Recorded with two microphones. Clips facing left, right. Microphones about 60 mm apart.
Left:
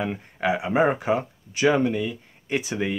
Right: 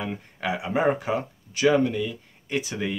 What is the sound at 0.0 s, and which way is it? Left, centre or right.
Speech, centre.